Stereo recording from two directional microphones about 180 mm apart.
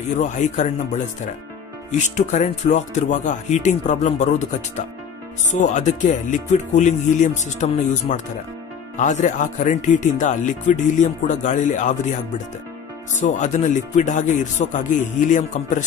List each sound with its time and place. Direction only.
0.2 s speech: 40° left (ahead or behind)
5.5 s speech: 40° left (ahead or behind)
13.2 s speech: 40° left (ahead or behind)